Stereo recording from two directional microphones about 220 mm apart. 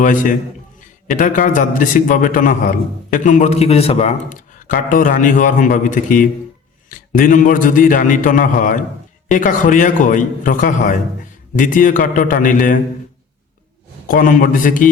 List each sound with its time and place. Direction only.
0.0 s a man's voice: 35° left (ahead or behind)
14.1 s a man's voice: 40° left (ahead or behind)